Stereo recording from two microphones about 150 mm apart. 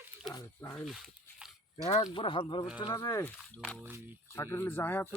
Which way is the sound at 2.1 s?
35° left (ahead or behind).